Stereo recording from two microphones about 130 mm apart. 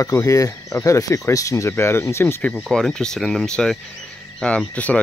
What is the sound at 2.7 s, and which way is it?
Speech, 5° left (ahead or behind).